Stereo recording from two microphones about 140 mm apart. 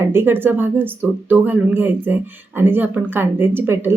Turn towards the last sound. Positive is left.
turn(degrees=-15)  # may be behind; listen again after turning